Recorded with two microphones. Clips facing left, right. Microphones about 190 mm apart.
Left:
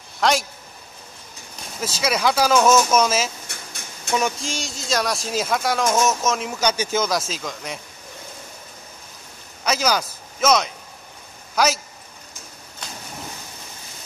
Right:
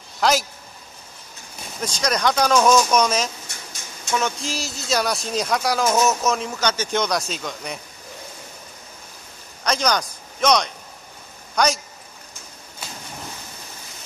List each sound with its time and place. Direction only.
0.2 s speech: centre (ahead or behind)
1.8 s speech: 5° left (ahead or behind)
3.4 s a sound: 60° left (ahead or behind)
4.4 s speech: centre (ahead or behind)
9.7 s a man's voice: 5° left (ahead or behind)
12.8 s a sound: 5° right (ahead or behind)